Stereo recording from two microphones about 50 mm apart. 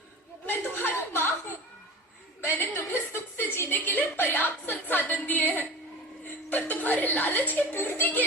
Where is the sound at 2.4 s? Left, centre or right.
Left.